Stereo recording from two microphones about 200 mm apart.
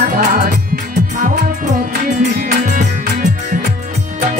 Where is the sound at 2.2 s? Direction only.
55° right (ahead or behind).